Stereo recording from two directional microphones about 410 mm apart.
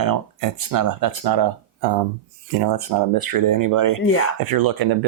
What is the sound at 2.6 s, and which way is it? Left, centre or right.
Speech, right.